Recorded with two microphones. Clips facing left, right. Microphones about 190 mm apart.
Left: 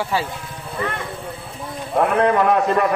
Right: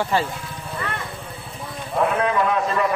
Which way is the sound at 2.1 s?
60° left (ahead or behind).